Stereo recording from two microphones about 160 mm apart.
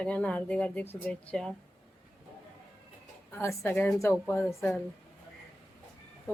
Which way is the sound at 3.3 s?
15° left (ahead or behind).